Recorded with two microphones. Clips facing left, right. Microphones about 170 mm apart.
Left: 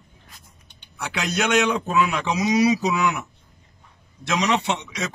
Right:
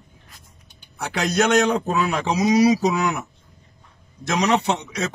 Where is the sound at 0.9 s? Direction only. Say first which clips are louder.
Right 5 dB; 40° right (ahead or behind).